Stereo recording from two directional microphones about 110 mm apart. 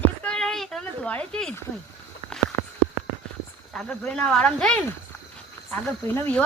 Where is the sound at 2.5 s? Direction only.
20° left (ahead or behind).